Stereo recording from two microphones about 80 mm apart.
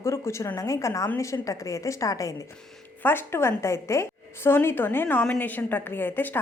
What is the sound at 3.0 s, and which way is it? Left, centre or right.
A woman's voice, left.